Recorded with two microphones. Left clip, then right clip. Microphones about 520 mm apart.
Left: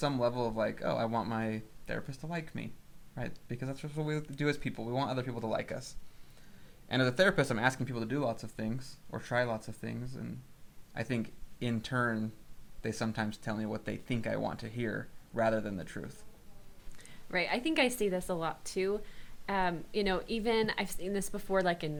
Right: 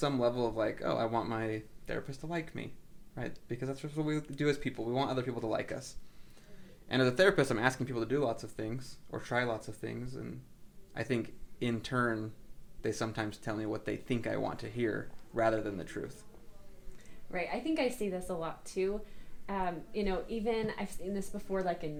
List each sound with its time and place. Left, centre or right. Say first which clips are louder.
0.0 s speech: right 1 dB; centre
17.0 s a woman's voice: left 4 dB; left